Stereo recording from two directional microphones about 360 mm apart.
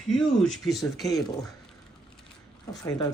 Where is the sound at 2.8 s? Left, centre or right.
Centre.